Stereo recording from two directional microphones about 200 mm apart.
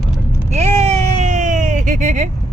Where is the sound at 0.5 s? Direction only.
30° right (ahead or behind).